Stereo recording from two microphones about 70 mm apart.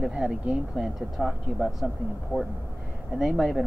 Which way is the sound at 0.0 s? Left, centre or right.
Centre.